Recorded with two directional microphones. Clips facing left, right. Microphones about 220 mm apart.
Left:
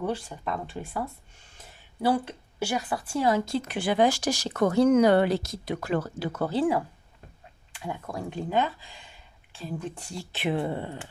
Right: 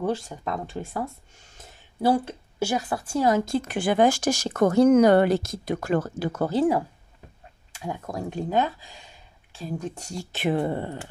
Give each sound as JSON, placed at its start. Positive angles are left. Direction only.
{"t": 0.0, "sound": "a woman's voice", "side_deg": -45}